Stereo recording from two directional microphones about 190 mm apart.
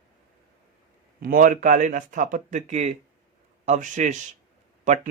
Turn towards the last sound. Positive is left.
turn(degrees=-40)  # may be behind; listen again after turning